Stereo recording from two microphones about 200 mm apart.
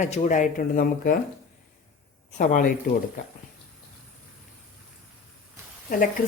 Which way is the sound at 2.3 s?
40° left (ahead or behind).